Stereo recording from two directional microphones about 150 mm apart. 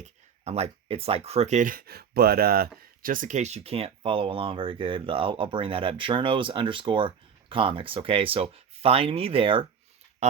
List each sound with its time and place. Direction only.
0.0 s speech: 45° right (ahead or behind)